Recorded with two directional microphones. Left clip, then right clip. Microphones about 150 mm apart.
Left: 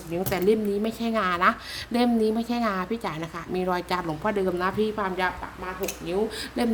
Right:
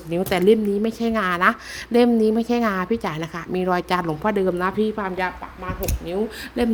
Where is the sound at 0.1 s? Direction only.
50° right (ahead or behind); by 5.3 s 35° right (ahead or behind).